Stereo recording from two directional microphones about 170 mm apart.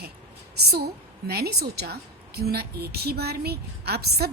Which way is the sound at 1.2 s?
70° right (ahead or behind).